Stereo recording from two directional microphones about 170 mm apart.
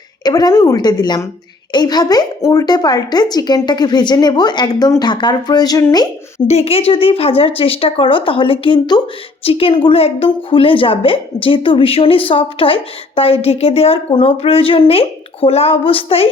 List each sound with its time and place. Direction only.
0.3 s a woman's voice: 25° left (ahead or behind)
6.5 s a woman's voice: 35° left (ahead or behind)